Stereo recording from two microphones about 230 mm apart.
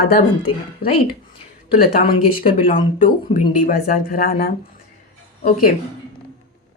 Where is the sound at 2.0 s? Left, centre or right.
Left.